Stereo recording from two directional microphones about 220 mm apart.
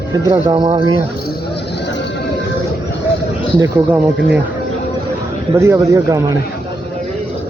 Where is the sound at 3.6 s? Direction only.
5° right (ahead or behind).